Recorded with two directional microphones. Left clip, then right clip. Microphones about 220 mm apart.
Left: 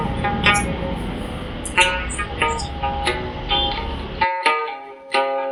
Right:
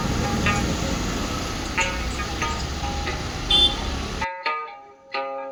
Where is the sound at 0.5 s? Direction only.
35° left (ahead or behind).